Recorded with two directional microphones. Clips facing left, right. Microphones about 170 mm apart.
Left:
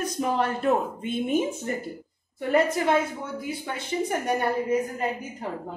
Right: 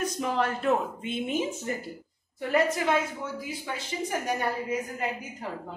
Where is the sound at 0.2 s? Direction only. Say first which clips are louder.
Left 4 dB; 40° left (ahead or behind); by 1.9 s 55° left (ahead or behind).